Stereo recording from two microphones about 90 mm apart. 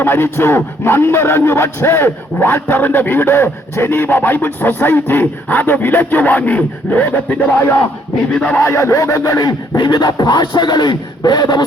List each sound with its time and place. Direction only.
0.0 s speech: 25° left (ahead or behind)
8.3 s speech: 10° left (ahead or behind)
8.5 s a sound: 30° left (ahead or behind); by 11.6 s 50° left (ahead or behind)